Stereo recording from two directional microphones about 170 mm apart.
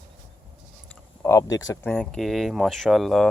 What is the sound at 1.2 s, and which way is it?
Speech, 15° left (ahead or behind).